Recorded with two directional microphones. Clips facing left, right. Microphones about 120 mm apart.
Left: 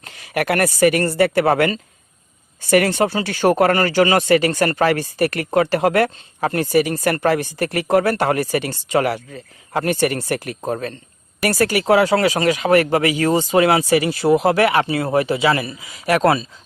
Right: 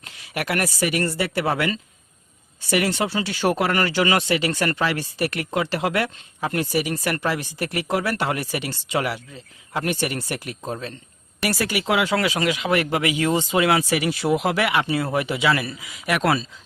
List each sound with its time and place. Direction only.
0.0 s speech: 50° left (ahead or behind)
14.8 s speech: 25° left (ahead or behind)
15.2 s speech: 35° left (ahead or behind)